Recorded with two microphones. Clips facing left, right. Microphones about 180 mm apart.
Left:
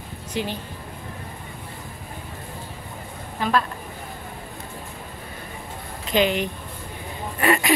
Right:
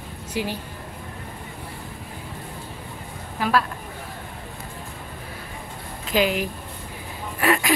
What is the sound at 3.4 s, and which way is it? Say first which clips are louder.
Speech: even; 5° right (ahead or behind).